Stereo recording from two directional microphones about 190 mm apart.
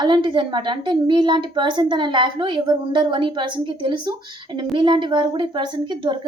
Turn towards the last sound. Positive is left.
turn(degrees=-25)  # may be behind; listen again after turning